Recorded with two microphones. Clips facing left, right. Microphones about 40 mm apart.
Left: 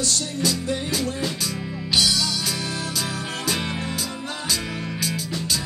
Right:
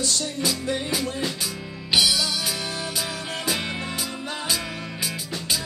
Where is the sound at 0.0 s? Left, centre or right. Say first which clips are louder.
Left 1 dB; right; by 3.9 s centre.